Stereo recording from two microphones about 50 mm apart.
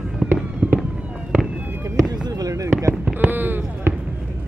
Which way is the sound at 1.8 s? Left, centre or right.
Right.